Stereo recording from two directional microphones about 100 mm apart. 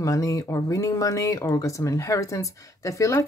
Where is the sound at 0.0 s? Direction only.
35° left (ahead or behind).